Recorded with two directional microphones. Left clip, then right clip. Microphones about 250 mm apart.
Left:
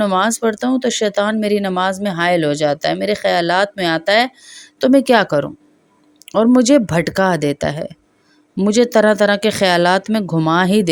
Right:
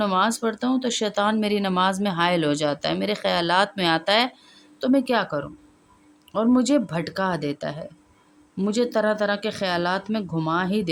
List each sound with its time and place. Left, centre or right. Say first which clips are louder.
0.0 s speech: left 6 dB; left